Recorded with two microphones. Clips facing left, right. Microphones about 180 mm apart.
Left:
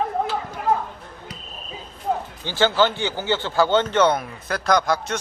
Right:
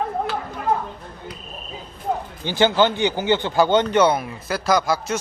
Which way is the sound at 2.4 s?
15° right (ahead or behind).